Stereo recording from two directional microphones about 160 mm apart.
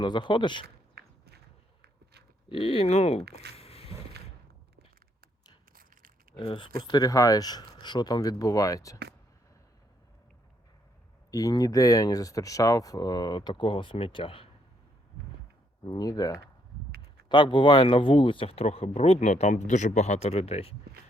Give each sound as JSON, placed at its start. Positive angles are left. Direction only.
{"t": 0.0, "sound": "speech", "side_deg": 30}
{"t": 0.9, "sound": "walk", "side_deg": -90}
{"t": 2.5, "sound": "speech", "side_deg": 35}
{"t": 3.6, "sound": "a sound", "side_deg": 40}
{"t": 6.3, "sound": "speech", "side_deg": 30}
{"t": 11.3, "sound": "speech", "side_deg": 20}
{"t": 15.8, "sound": "speech", "side_deg": 25}